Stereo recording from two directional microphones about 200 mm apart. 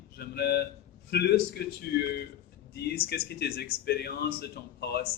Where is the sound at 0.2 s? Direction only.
55° left (ahead or behind).